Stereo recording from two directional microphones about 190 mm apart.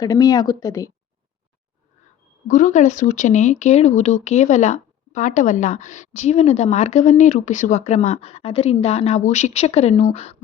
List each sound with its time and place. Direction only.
0.0 s speech: 20° left (ahead or behind)
2.5 s speech: 40° left (ahead or behind)